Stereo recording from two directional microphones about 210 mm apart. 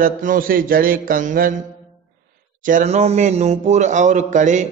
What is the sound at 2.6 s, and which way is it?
A man's voice, 35° right (ahead or behind).